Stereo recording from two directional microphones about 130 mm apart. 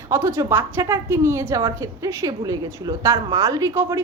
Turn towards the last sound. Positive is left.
turn(degrees=-25)  # may be behind; listen again after turning